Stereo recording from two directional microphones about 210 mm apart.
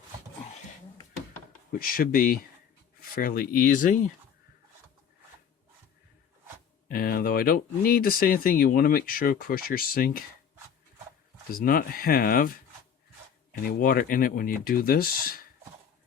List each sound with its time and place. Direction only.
1.8 s speech: 45° left (ahead or behind)
6.8 s speech: 45° left (ahead or behind)
11.5 s speech: 40° left (ahead or behind)